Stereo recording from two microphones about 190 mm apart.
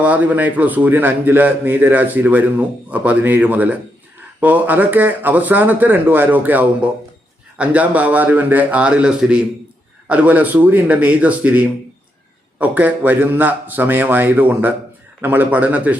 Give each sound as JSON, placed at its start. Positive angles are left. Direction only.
{"t": 0.0, "sound": "a man's voice", "side_deg": -10}